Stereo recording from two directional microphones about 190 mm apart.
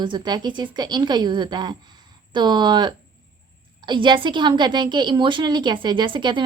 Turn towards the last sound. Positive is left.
turn(degrees=-25)  # may be behind; listen again after turning